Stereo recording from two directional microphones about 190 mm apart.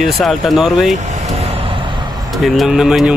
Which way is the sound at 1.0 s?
35° right (ahead or behind).